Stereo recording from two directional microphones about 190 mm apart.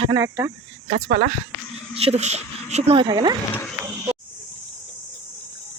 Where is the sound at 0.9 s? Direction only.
35° right (ahead or behind).